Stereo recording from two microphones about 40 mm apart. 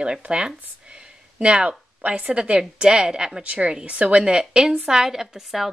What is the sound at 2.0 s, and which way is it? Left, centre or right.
Speech, right.